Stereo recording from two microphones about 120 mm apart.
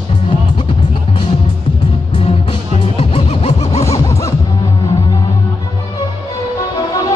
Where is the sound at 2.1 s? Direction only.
50° left (ahead or behind).